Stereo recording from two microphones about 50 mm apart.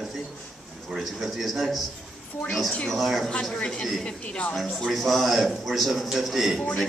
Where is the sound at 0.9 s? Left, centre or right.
Centre.